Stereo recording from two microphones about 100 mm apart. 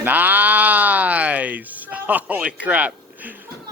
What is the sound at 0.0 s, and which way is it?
Speech, 20° right (ahead or behind).